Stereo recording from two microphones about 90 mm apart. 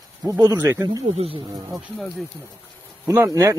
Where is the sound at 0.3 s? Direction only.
45° right (ahead or behind).